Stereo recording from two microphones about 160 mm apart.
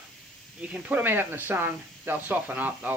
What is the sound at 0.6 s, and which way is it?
Speech, 10° right (ahead or behind).